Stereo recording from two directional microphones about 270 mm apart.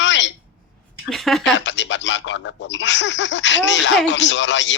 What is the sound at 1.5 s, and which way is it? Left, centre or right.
A man's voice, left.